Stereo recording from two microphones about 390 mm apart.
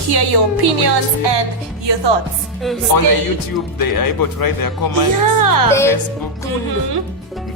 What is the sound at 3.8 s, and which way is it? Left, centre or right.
Speech, left.